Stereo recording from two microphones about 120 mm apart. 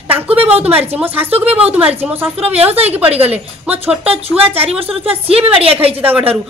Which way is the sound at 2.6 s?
55° right (ahead or behind).